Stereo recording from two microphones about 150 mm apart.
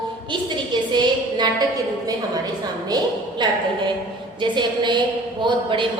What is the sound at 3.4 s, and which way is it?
A woman's voice, 30° right (ahead or behind).